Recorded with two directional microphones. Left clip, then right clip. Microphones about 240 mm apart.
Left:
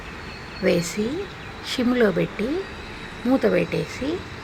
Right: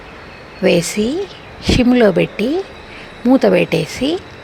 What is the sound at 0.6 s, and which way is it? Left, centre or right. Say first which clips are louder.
Speech: right 8 dB; right.